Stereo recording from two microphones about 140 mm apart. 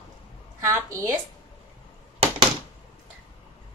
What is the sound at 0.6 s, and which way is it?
Speech, 20° right (ahead or behind).